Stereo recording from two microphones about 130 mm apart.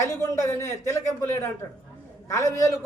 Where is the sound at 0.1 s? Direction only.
25° left (ahead or behind).